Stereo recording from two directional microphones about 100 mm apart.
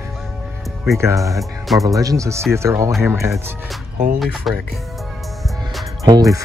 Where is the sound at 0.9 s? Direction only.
30° right (ahead or behind).